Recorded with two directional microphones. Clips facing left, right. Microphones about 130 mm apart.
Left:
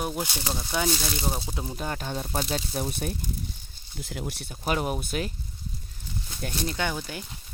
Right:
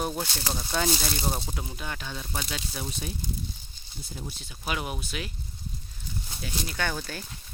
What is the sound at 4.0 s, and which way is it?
Speech, 90° left.